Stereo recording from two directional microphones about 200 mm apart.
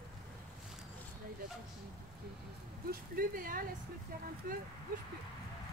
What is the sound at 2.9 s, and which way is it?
Speech, 45° right (ahead or behind).